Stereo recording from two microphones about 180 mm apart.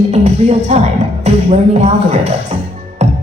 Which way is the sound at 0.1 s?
35° right (ahead or behind).